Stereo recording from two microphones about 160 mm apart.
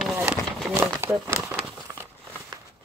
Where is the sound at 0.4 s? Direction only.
5° left (ahead or behind).